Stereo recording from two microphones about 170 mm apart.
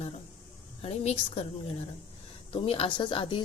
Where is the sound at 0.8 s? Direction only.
40° left (ahead or behind).